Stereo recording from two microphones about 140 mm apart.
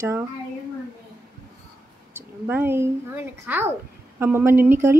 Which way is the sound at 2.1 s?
15° right (ahead or behind).